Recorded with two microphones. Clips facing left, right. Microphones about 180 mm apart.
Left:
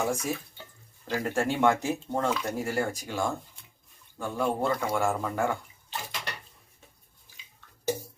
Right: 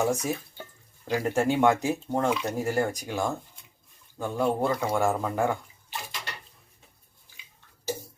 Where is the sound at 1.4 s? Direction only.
15° right (ahead or behind).